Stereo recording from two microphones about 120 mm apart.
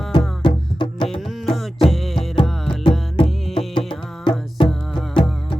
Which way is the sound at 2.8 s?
45° left (ahead or behind).